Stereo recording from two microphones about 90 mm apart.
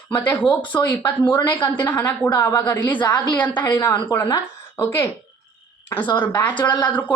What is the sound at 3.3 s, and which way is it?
Speech, 20° left (ahead or behind).